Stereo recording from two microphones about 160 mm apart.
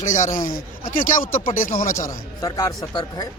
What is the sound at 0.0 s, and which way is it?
Speech, 55° left (ahead or behind).